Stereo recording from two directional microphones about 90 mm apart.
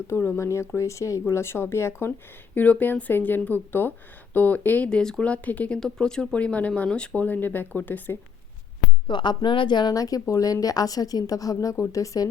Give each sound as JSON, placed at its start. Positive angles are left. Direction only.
{"t": 0.1, "sound": "a woman's voice", "side_deg": 30}
{"t": 9.0, "sound": "speech", "side_deg": 60}
{"t": 9.9, "sound": "a woman's voice", "side_deg": 40}